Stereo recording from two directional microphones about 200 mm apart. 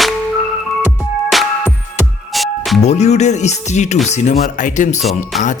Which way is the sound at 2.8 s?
35° left (ahead or behind).